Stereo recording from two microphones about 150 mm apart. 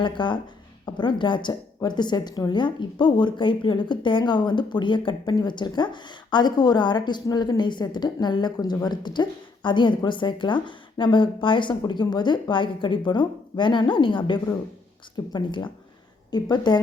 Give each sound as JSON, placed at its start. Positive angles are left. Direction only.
{"t": 0.0, "sound": "a woman's voice", "side_deg": 30}